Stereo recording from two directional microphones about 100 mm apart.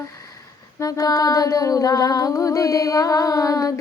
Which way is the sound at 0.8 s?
40° left (ahead or behind).